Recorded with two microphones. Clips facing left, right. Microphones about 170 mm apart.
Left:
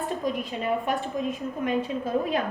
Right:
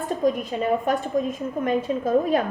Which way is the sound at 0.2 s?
45° right (ahead or behind).